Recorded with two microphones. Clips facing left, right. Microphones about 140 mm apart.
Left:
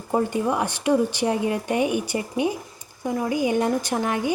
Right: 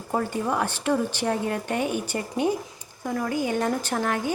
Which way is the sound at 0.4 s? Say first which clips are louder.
Left 2 dB; 15° left (ahead or behind).